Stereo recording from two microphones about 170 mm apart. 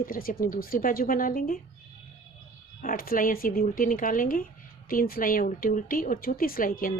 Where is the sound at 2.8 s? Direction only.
55° left (ahead or behind).